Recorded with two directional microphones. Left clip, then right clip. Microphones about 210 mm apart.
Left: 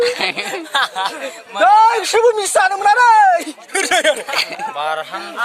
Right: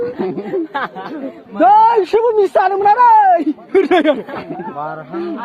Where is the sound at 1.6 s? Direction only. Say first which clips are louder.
Right 1 dB; 35° right (ahead or behind).